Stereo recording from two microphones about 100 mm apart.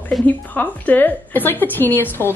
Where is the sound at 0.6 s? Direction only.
20° left (ahead or behind).